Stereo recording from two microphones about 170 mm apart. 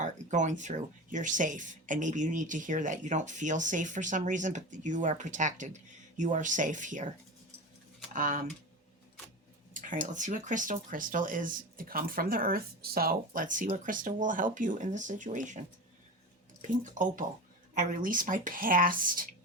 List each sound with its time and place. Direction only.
0.0 s speech: 45° right (ahead or behind)
8.1 s speech: 50° right (ahead or behind)
9.8 s speech: 50° right (ahead or behind)
16.6 s speech: 50° right (ahead or behind)